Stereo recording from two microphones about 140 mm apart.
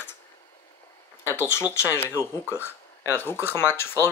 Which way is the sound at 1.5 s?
20° left (ahead or behind).